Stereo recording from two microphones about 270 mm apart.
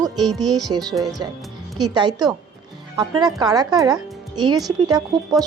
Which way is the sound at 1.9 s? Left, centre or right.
Centre.